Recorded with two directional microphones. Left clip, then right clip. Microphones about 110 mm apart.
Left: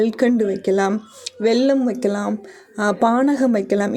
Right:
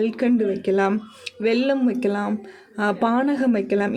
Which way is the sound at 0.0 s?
45° left (ahead or behind).